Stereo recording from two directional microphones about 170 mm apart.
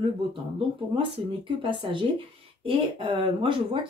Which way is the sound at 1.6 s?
30° right (ahead or behind).